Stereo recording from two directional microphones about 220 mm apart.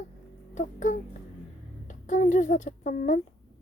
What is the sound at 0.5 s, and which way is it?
Music, 35° left (ahead or behind).